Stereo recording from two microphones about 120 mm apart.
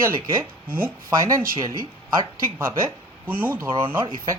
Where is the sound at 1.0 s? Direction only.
30° right (ahead or behind).